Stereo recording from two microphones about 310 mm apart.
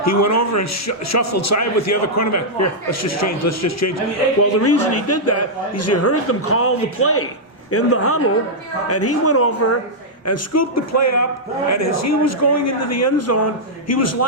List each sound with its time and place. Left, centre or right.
0.0 s a man's voice: left